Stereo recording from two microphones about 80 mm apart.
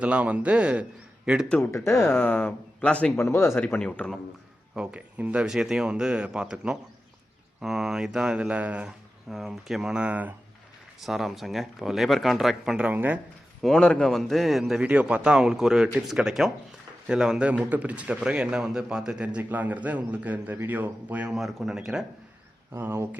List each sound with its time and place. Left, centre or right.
0.0 s speech: centre
1.7 s speech: left; by 3.1 s centre
3.2 s speech: left
3.6 s speech: centre
4.7 s speech: centre
5.5 s speech: centre
9.3 s speech: centre
11.0 s speech: centre
12.8 s speech: right
13.6 s speech: centre
14.8 s speech: centre
21.2 s speech: centre
22.7 s speech: right